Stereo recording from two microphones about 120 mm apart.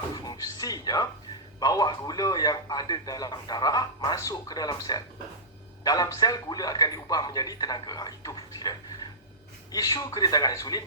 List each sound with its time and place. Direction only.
0.1 s music: 35° left (ahead or behind)
1.5 s a man's voice: 30° left (ahead or behind)
9.7 s a man's voice: 30° left (ahead or behind)